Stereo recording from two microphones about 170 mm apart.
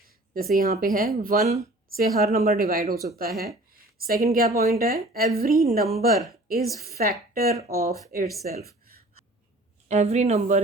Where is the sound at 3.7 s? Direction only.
60° right (ahead or behind).